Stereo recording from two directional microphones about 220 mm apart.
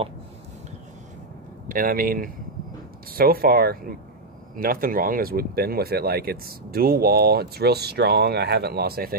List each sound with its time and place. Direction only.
1.7 s speech: 40° right (ahead or behind)